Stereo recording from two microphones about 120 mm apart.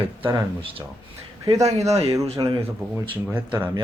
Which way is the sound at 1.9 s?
60° right (ahead or behind).